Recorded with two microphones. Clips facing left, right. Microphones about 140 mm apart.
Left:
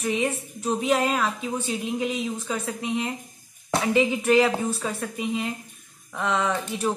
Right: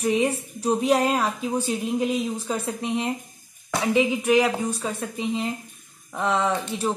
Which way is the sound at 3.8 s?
15° right (ahead or behind).